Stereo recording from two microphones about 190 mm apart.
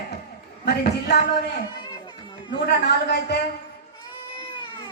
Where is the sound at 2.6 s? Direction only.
60° left (ahead or behind).